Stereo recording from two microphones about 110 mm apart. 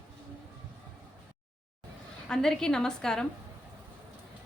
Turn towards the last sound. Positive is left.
turn(degrees=5)  # may be behind; listen again after turning